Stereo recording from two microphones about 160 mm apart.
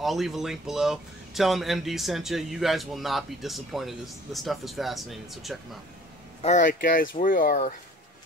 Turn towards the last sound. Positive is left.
turn(degrees=55)  # may be behind; listen again after turning